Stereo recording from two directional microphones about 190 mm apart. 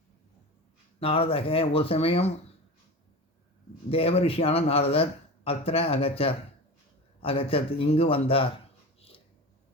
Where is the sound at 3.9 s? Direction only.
30° left (ahead or behind).